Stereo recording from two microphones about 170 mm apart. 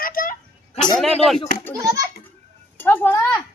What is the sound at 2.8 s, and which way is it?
Speech, 10° left (ahead or behind).